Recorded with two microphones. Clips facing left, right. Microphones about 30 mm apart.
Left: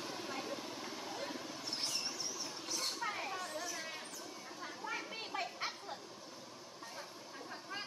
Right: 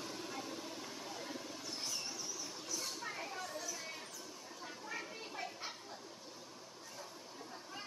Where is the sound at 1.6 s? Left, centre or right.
Left.